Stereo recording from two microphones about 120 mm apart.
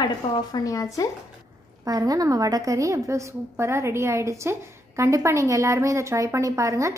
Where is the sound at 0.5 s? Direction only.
30° left (ahead or behind).